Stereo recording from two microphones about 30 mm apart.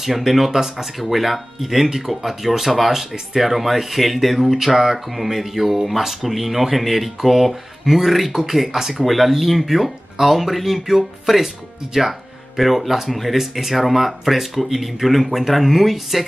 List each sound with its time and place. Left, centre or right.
0.0 s speech: centre
0.9 s speech: centre
8.3 s speech: centre
9.0 s speech: centre